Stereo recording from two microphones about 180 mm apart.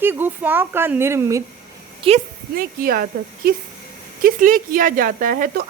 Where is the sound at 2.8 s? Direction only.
55° right (ahead or behind).